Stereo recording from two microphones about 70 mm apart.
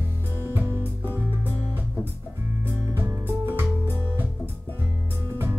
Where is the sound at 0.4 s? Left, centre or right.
Right.